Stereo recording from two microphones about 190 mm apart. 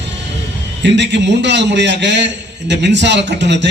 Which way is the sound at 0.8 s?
65° right (ahead or behind).